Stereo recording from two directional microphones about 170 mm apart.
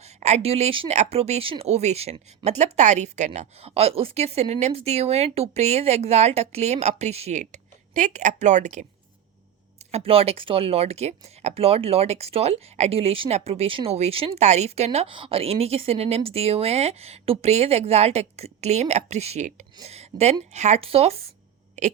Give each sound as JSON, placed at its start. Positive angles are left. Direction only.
{"t": 0.2, "sound": "speech", "side_deg": -40}
{"t": 9.9, "sound": "speech", "side_deg": -35}